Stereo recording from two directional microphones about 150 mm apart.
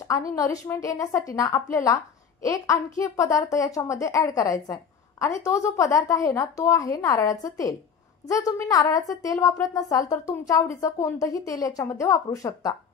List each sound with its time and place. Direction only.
0.4 s speech: 20° left (ahead or behind)